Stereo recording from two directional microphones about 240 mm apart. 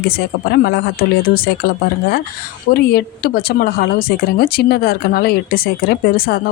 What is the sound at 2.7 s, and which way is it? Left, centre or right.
Speech, left.